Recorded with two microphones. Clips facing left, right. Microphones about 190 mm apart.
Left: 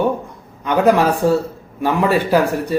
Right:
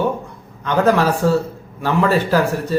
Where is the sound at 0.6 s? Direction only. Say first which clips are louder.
Left 2 dB; 15° left (ahead or behind).